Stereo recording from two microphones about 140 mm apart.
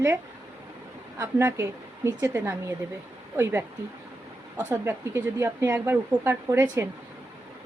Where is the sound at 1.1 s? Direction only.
20° right (ahead or behind).